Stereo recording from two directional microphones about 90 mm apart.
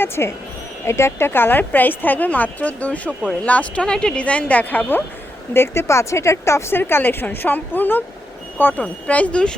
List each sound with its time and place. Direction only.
0.0 s a woman's voice: 25° left (ahead or behind); by 9.6 s 10° left (ahead or behind)